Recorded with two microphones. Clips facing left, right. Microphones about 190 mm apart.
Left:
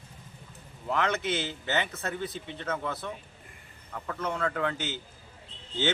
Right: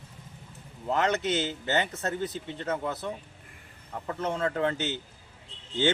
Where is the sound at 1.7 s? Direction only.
40° right (ahead or behind).